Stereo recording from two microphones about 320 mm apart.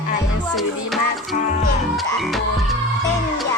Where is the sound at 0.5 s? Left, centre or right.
Centre.